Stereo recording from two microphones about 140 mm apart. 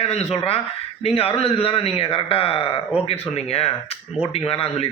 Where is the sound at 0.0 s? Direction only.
50° left (ahead or behind).